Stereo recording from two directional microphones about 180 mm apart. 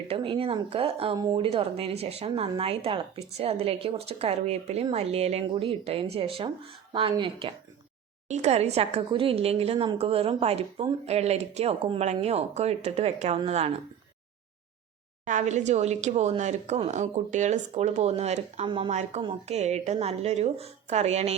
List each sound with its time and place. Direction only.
0.1 s speech: 30° right (ahead or behind)
15.2 s speech: 45° right (ahead or behind)